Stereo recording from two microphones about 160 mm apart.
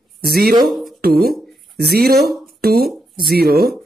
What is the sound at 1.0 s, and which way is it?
Speech, 70° right (ahead or behind).